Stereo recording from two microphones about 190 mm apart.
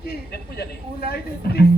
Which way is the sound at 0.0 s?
55° left (ahead or behind).